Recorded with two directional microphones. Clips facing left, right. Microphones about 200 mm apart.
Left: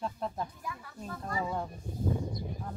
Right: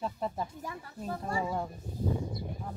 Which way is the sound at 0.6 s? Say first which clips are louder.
Right 3 dB; 30° right (ahead or behind).